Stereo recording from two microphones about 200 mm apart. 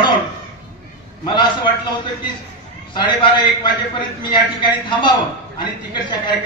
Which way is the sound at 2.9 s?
25° left (ahead or behind).